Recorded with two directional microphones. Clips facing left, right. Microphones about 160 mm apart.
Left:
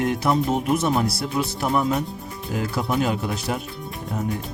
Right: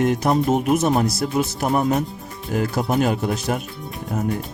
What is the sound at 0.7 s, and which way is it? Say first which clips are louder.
Speech: right 3 dB; 45° right (ahead or behind).